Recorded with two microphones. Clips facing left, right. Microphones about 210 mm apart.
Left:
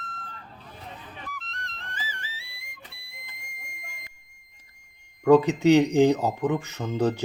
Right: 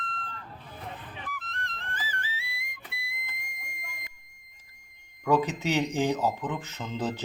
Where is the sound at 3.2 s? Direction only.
30° left (ahead or behind).